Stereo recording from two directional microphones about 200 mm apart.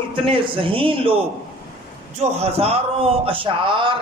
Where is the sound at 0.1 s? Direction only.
25° right (ahead or behind).